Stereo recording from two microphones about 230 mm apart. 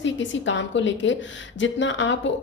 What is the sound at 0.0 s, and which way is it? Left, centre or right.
A woman's voice, left.